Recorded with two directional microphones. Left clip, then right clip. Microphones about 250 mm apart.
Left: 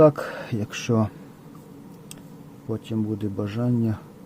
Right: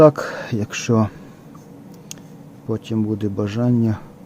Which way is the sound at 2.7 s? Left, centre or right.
Centre.